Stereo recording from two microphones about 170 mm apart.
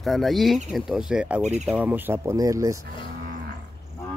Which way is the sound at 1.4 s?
40° right (ahead or behind).